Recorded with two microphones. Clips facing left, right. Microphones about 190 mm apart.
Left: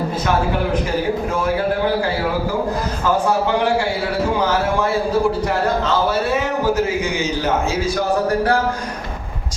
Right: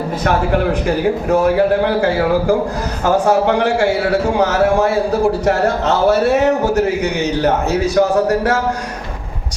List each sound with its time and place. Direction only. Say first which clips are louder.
3.0 s a man's voice: right 5 dB; 80° right